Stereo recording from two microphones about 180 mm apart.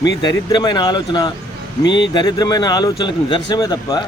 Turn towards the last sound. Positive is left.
turn(degrees=20)  # may be behind; listen again after turning